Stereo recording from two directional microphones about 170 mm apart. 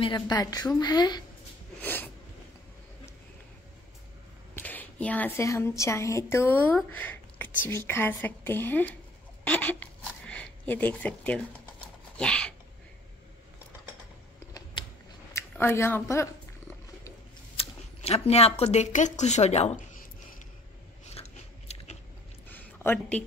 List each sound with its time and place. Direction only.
0.0 s a woman's voice: 25° left (ahead or behind)
1.8 s snort: 10° left (ahead or behind)
4.6 s a woman's voice: 10° left (ahead or behind)
9.4 s a sound: 10° left (ahead or behind)
14.5 s a sound: 25° left (ahead or behind)
15.3 s speech: 15° left (ahead or behind)
17.6 s speech: 35° left (ahead or behind)
21.0 s biting: 40° left (ahead or behind)
22.5 s a sound: 10° left (ahead or behind)